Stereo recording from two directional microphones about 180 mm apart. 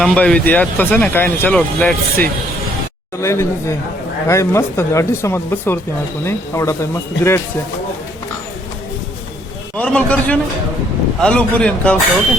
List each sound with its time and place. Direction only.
0.0 s speech: 5° left (ahead or behind)
9.7 s speech: 5° left (ahead or behind)